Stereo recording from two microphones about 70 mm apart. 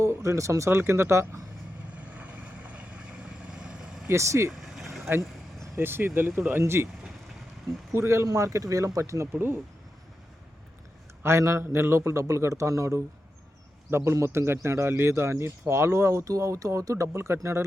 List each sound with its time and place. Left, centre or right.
0.0 s a man's voice: right
2.0 s vehicle: centre
4.1 s a man's voice: right
4.6 s vehicle: centre
5.5 s vehicle: right
6.1 s speech: right
6.5 s speech: right
7.9 s a man's voice: right
11.2 s a man's voice: right